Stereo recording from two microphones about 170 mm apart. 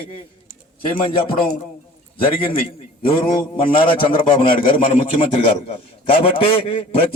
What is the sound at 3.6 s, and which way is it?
A man's voice, 30° left (ahead or behind).